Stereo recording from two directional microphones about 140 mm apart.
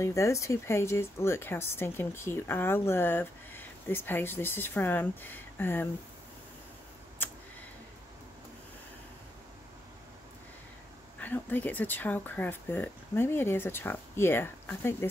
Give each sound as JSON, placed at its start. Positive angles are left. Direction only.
{"t": 0.0, "sound": "speech", "side_deg": 20}
{"t": 7.2, "sound": "tick", "side_deg": 15}
{"t": 11.1, "sound": "speech", "side_deg": 15}